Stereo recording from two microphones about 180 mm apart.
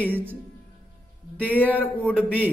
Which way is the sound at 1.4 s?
10° left (ahead or behind).